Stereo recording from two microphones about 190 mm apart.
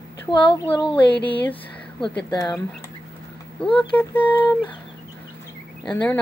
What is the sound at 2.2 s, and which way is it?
Speech, 20° left (ahead or behind).